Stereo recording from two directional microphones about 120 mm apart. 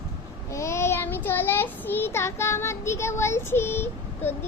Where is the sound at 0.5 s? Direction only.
25° left (ahead or behind).